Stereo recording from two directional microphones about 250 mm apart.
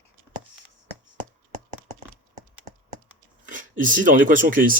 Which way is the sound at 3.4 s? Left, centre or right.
Right.